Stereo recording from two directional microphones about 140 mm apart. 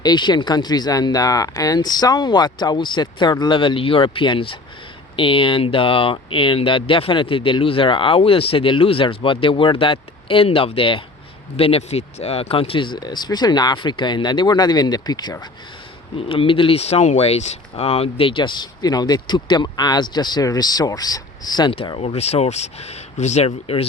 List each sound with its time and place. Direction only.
0.0 s speech: 30° left (ahead or behind)